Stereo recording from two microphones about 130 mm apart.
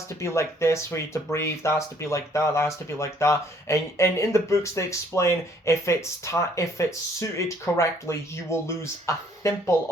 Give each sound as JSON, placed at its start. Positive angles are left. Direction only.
{"t": 0.2, "sound": "speech", "side_deg": 20}